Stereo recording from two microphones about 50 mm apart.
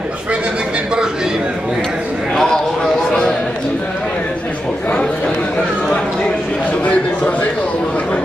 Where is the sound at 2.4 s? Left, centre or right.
Centre.